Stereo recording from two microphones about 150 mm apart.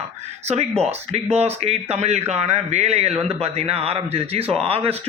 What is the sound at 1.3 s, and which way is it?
Speech, 45° right (ahead or behind).